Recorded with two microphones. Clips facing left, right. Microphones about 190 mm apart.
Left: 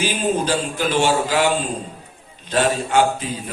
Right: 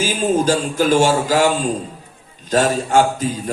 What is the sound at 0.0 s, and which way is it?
Music, 45° right (ahead or behind).